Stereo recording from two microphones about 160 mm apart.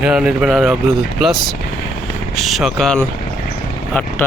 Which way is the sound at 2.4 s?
Centre (ahead or behind).